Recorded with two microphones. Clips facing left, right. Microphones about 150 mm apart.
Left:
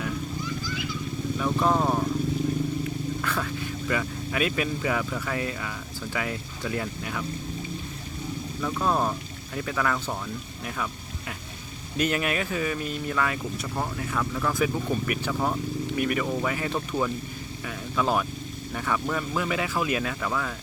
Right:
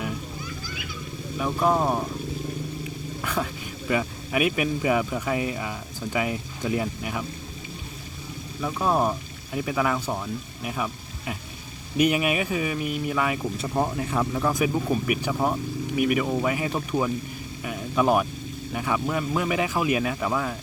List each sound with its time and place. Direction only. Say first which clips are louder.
1.4 s speech: right 2 dB; 10° right (ahead or behind)
3.2 s speech: right 1 dB; 15° right (ahead or behind)
8.6 s speech: right 2 dB; 10° right (ahead or behind)
11.9 s speech: right 4 dB; 15° right (ahead or behind)
13.6 s speech: right 5 dB; 25° right (ahead or behind)
17.7 s vehicle: right 4 dB; 15° right (ahead or behind)
18.7 s speech: right 2 dB; 15° right (ahead or behind)